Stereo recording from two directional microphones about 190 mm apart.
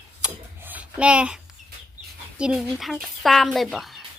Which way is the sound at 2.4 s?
5° right (ahead or behind).